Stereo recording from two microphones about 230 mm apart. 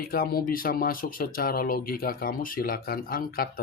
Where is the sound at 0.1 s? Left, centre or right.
Left.